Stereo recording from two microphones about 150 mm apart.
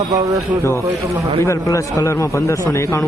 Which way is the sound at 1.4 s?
20° left (ahead or behind).